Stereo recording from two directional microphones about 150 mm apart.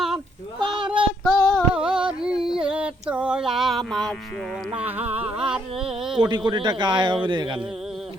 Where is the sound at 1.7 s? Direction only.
5° right (ahead or behind).